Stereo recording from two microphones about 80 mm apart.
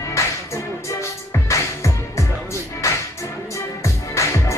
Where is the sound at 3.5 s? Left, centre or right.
Left.